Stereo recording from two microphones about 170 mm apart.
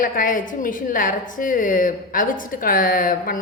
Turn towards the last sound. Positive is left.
turn(degrees=55)  # may be behind; listen again after turning